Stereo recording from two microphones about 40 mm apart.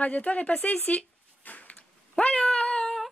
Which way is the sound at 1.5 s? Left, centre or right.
Left.